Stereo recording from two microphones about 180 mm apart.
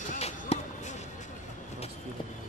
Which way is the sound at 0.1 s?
40° left (ahead or behind).